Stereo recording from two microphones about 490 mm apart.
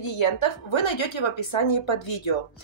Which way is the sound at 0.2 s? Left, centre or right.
Left.